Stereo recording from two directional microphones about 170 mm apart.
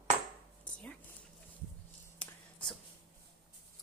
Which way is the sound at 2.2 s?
5° left (ahead or behind).